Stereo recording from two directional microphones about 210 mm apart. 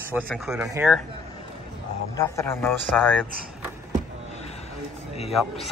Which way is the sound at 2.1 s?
10° left (ahead or behind).